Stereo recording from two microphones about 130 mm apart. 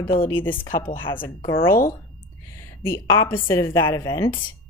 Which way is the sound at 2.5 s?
20° left (ahead or behind).